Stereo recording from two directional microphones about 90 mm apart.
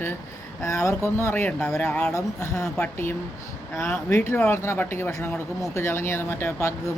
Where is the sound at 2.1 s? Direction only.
35° left (ahead or behind).